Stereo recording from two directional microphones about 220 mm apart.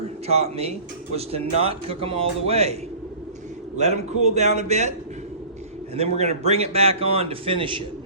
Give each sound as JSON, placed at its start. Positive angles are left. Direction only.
{"t": 0.3, "sound": "a man's voice", "side_deg": -30}
{"t": 3.8, "sound": "a man's voice", "side_deg": -30}
{"t": 6.0, "sound": "a man's voice", "side_deg": -30}